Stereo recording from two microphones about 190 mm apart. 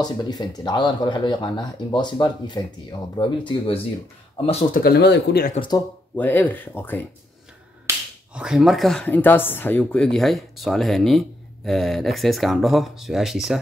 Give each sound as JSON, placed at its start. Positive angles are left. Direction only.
{"t": 0.0, "sound": "speech", "side_deg": 20}
{"t": 4.7, "sound": "speech", "side_deg": 55}
{"t": 5.7, "sound": "speech", "side_deg": 20}
{"t": 8.4, "sound": "speech", "side_deg": -5}